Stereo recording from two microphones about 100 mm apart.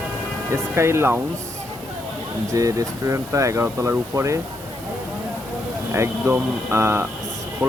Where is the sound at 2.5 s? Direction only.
35° right (ahead or behind).